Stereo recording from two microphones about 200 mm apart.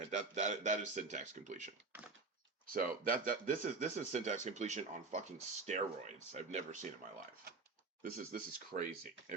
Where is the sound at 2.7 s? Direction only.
45° right (ahead or behind).